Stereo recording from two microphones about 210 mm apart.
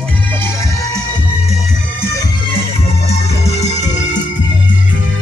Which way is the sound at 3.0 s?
30° left (ahead or behind).